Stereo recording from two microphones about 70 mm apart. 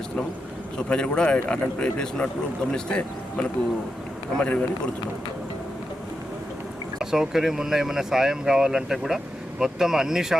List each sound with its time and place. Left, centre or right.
0.8 s speech: centre
7.0 s speech: centre